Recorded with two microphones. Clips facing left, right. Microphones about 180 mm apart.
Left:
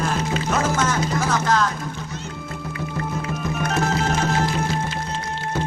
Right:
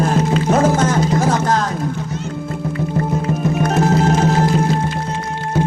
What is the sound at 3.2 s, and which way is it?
Music, 35° right (ahead or behind).